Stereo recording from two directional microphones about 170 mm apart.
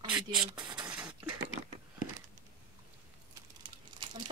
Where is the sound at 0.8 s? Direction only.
5° right (ahead or behind).